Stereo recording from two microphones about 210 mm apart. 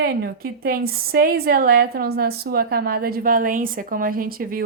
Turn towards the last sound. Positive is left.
turn(degrees=-45)  # may be behind; listen again after turning